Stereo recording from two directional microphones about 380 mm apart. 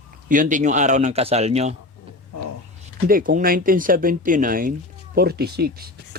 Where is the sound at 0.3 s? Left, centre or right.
Centre.